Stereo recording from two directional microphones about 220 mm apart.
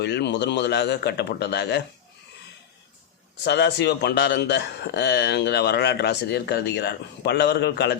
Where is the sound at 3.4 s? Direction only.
50° left (ahead or behind).